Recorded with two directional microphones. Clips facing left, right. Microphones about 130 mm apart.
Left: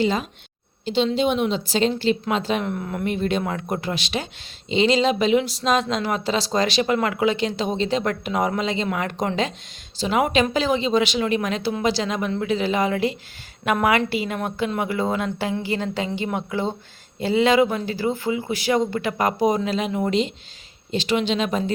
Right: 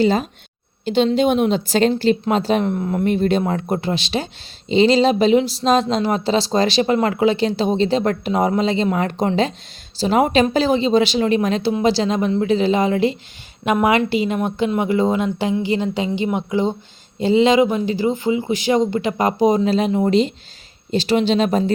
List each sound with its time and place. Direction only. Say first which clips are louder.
0.0 s speech: right 5 dB; 40° right (ahead or behind)
0.9 s a woman's voice: right 4 dB; 50° right (ahead or behind)
2.3 s speech: right 5 dB; 35° right (ahead or behind)